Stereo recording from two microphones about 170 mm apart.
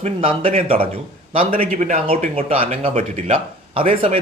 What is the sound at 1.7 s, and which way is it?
Speech, 50° right (ahead or behind).